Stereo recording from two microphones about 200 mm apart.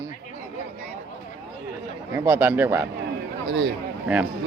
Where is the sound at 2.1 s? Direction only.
10° right (ahead or behind).